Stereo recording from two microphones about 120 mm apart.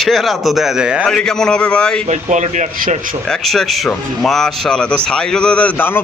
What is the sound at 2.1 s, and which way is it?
Speech, 80° right.